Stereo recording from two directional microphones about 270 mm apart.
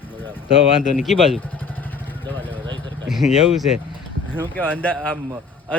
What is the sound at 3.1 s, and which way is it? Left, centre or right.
Speech, centre.